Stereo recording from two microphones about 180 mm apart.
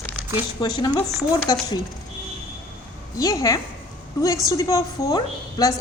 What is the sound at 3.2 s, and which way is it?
A woman's voice, 20° left (ahead or behind).